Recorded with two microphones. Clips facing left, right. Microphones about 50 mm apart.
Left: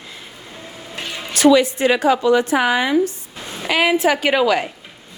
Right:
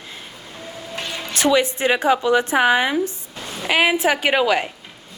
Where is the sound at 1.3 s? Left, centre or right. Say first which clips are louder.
Left 5 dB; right.